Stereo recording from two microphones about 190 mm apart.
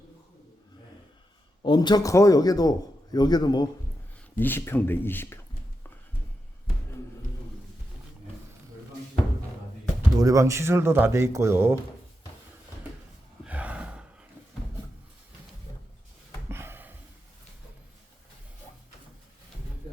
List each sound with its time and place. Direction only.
1.6 s a man's voice: 20° left (ahead or behind)
4.4 s speech: 10° left (ahead or behind)
10.2 s speech: 15° right (ahead or behind)
13.4 s gasp: 5° right (ahead or behind)
16.5 s a sound: 10° right (ahead or behind)